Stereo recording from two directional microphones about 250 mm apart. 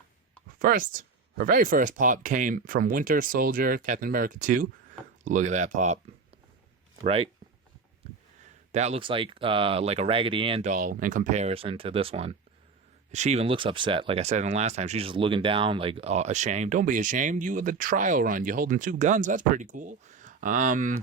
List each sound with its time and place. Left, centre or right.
0.6 s speech: right
7.0 s speech: right
8.7 s speech: right